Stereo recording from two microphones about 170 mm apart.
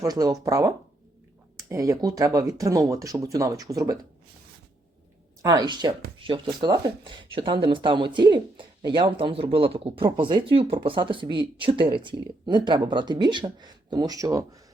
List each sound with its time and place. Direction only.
0.0 s speech: 20° right (ahead or behind)
5.4 s speech: 20° right (ahead or behind)